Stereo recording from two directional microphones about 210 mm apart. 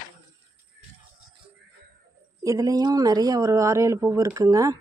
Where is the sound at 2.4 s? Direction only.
15° right (ahead or behind).